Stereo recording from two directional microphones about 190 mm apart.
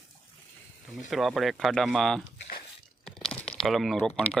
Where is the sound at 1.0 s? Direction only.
Centre (ahead or behind).